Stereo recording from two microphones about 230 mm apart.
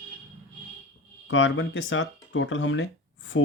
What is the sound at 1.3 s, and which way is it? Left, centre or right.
Speech, left.